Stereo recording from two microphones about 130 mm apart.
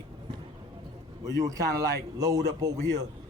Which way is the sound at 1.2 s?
25° right (ahead or behind).